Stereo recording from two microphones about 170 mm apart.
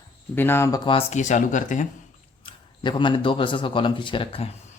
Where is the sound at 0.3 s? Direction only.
15° left (ahead or behind).